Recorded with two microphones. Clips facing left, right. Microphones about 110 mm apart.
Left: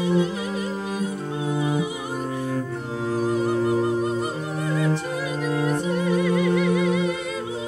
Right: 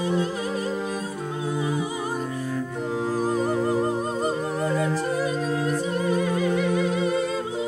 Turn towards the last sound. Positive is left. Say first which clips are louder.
# left 1 dB
turn(degrees=-40)  # may be behind; listen again after turning